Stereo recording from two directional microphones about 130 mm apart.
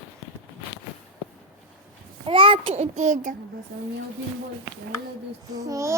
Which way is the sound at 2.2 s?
40° right (ahead or behind).